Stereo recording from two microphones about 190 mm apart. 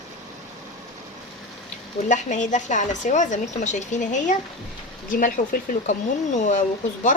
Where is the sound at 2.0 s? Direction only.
40° left (ahead or behind).